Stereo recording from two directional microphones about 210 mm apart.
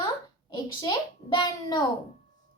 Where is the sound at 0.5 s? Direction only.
20° left (ahead or behind).